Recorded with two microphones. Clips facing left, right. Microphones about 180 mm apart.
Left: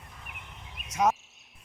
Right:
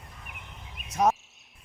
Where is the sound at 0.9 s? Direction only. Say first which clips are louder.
Right 2 dB; 35° right (ahead or behind).